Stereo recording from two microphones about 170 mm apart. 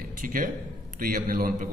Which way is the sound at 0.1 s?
50° right (ahead or behind).